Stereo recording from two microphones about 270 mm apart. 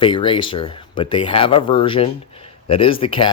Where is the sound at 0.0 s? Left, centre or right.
Centre.